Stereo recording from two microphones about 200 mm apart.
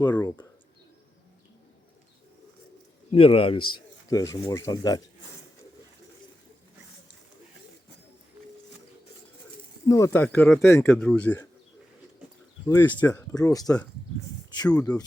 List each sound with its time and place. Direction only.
0.0 s a man's voice: 20° left (ahead or behind)
3.1 s a man's voice: 25° left (ahead or behind)
9.8 s speech: 15° left (ahead or behind)
12.6 s a man's voice: 10° left (ahead or behind)